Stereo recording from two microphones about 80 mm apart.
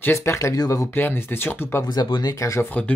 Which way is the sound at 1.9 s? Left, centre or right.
Left.